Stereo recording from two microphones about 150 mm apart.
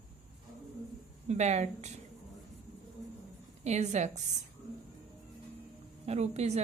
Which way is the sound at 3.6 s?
50° right (ahead or behind).